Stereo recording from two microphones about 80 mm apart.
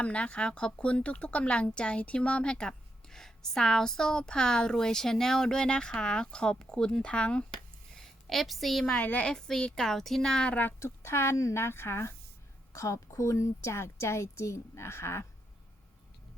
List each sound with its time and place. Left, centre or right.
0.0 s speech: centre
7.9 s a sound: centre
8.9 s speech: centre
10.8 s a woman's voice: left